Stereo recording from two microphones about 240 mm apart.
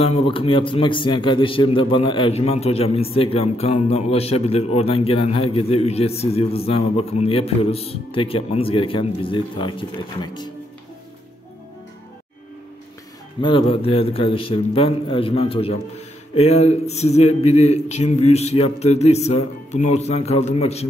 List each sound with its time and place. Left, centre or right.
0.0 s a man's voice: left
13.4 s a man's voice: left